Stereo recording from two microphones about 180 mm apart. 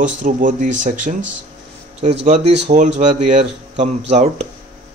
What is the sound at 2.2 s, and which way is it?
Speech, 40° right (ahead or behind).